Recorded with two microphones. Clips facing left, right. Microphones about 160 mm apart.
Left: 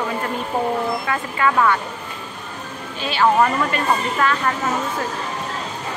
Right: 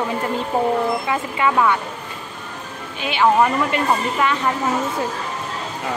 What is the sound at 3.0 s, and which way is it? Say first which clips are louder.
A woman's voice: right 1 dB; 15° right (ahead or behind).